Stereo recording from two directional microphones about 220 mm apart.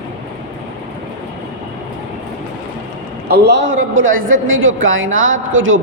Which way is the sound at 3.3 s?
50° right (ahead or behind).